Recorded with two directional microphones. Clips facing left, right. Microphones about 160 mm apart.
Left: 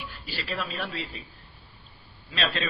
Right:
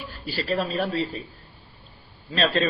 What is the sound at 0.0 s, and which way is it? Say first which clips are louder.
Speech: right 6 dB; 40° right (ahead or behind).